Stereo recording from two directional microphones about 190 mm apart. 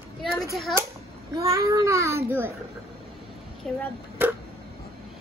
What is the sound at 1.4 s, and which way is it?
A child's voice, 15° right (ahead or behind).